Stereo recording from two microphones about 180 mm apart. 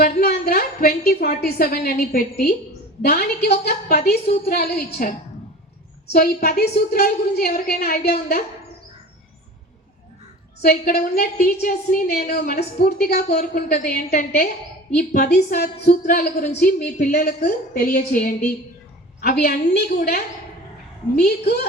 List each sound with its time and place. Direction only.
0.0 s a woman's voice: 55° left (ahead or behind)
10.6 s a woman's voice: 60° left (ahead or behind)
15.9 s a woman's voice: 45° left (ahead or behind)
16.6 s a woman's voice: 60° left (ahead or behind)
17.0 s a woman's voice: 50° left (ahead or behind)
19.4 s a woman's voice: 60° left (ahead or behind)